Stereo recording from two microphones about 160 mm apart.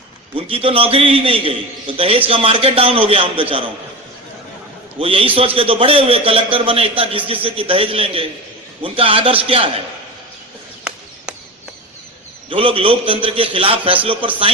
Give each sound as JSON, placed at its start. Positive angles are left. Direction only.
{"t": 0.3, "sound": "a man's voice", "side_deg": -35}
{"t": 4.9, "sound": "a man's voice", "side_deg": -35}
{"t": 12.5, "sound": "a man's voice", "side_deg": -35}